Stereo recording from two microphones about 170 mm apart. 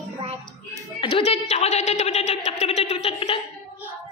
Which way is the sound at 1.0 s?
35° left (ahead or behind).